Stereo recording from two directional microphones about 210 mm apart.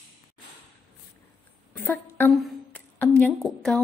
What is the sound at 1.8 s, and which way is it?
A woman's voice, 10° left (ahead or behind).